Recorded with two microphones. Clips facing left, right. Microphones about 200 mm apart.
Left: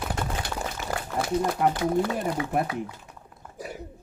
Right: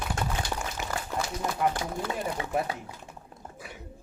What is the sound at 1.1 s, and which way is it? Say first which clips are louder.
Speech: left 8 dB; 60° left (ahead or behind).